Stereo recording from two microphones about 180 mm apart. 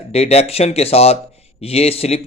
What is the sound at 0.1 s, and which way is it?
Speech, 35° left (ahead or behind).